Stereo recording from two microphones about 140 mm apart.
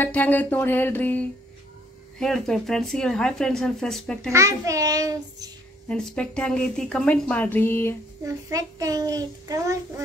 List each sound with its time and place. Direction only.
0.0 s a woman's voice: 10° left (ahead or behind)
4.3 s a child's voice: 20° right (ahead or behind)
5.9 s a woman's voice: 5° left (ahead or behind)
8.2 s a child's voice: 25° right (ahead or behind)